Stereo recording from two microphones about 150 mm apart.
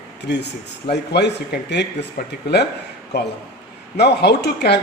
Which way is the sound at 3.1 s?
90° left.